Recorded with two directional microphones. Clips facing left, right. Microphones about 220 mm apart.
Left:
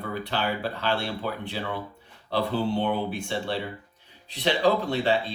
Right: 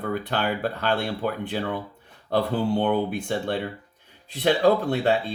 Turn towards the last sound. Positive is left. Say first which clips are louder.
# right 3 dB
turn(degrees=-50)  # may be behind; listen again after turning